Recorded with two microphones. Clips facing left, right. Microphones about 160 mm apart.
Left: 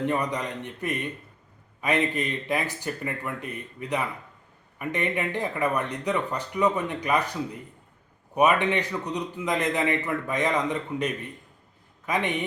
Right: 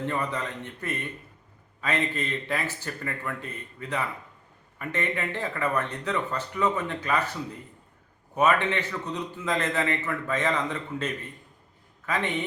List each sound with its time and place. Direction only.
0.0 s speech: 15° left (ahead or behind)